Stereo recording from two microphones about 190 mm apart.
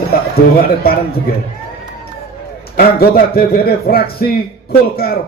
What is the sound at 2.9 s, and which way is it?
A man's voice, 55° left (ahead or behind).